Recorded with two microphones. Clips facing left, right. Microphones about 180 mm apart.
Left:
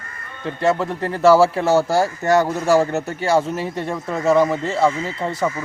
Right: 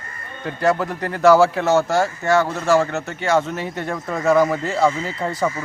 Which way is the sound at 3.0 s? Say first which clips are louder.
Left 1 dB; 35° left (ahead or behind).